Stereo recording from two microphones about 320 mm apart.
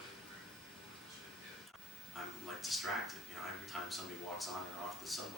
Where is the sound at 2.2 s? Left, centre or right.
Centre.